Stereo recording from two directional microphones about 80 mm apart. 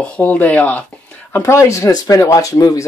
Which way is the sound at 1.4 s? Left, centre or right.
Left.